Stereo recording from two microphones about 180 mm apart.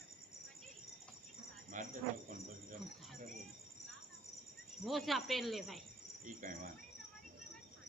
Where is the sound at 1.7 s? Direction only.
45° right (ahead or behind).